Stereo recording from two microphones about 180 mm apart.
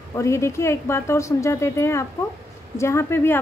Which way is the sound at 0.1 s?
15° left (ahead or behind).